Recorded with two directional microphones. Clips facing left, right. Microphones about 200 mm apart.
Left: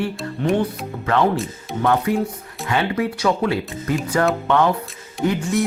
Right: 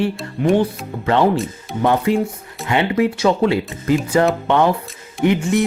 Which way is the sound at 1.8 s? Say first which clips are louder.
Right 3 dB; 25° right (ahead or behind).